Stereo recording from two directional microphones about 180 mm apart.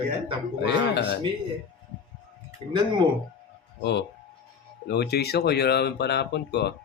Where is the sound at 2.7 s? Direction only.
25° right (ahead or behind).